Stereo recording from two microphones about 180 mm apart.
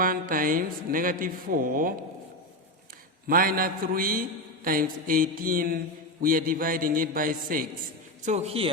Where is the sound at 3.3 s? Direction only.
55° right (ahead or behind).